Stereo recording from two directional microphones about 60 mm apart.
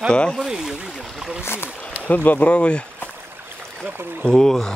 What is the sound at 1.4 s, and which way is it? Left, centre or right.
Speech, left.